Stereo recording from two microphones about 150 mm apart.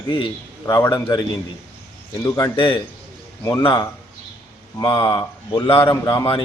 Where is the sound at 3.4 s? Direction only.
20° left (ahead or behind).